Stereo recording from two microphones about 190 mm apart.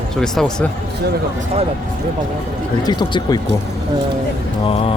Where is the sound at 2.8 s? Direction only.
20° left (ahead or behind).